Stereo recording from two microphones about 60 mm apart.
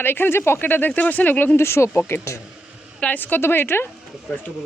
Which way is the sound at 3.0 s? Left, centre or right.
Left.